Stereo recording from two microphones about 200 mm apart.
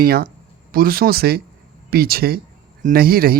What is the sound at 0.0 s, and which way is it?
Speech, 50° right (ahead or behind).